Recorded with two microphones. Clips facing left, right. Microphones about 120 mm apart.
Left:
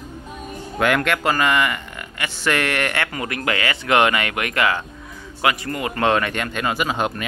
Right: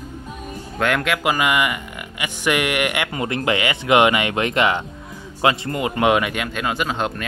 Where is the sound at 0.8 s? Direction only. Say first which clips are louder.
Left 1 dB; centre (ahead or behind).